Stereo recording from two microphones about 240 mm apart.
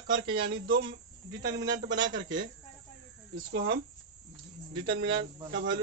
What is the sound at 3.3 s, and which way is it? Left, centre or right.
Speech, right.